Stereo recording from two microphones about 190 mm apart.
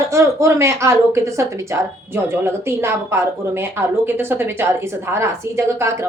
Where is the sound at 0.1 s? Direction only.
15° right (ahead or behind).